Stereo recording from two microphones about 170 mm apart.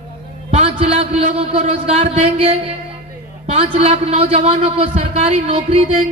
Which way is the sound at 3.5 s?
35° right (ahead or behind).